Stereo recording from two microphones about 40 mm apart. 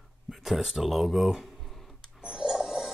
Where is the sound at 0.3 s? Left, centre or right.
Centre.